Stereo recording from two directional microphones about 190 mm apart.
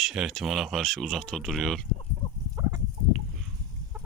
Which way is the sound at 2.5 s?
20° right (ahead or behind).